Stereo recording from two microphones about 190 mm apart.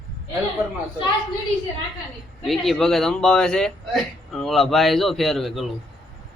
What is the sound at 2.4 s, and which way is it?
Speech, centre (ahead or behind).